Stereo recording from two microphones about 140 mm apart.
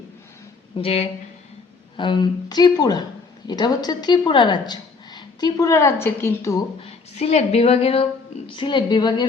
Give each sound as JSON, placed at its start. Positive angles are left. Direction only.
{"t": 0.8, "sound": "a woman's voice", "side_deg": 45}
{"t": 2.0, "sound": "a woman's voice", "side_deg": 35}
{"t": 6.8, "sound": "a woman's voice", "side_deg": 50}